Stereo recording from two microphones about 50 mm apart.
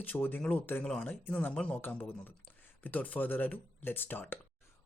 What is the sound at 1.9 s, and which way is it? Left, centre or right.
Speech, left.